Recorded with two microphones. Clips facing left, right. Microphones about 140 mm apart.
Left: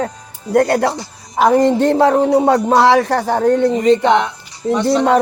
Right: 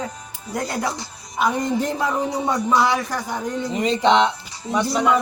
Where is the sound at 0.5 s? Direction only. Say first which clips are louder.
Left 12 dB; 65° left (ahead or behind).